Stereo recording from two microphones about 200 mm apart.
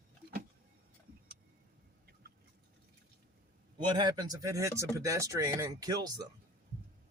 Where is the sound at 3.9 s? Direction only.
20° right (ahead or behind).